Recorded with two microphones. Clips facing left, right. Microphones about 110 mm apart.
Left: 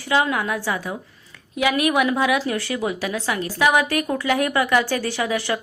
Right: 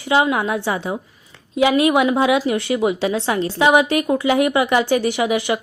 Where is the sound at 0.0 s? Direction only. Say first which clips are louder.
Right 4 dB; 20° right (ahead or behind).